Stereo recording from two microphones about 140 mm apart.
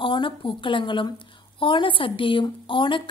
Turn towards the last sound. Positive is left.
turn(degrees=35)  # may be behind; listen again after turning